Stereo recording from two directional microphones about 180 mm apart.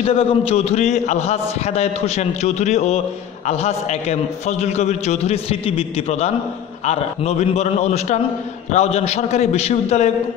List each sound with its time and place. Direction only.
0.0 s a man's voice: 35° left (ahead or behind)